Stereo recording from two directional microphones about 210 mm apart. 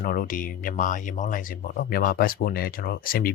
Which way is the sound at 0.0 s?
40° left (ahead or behind).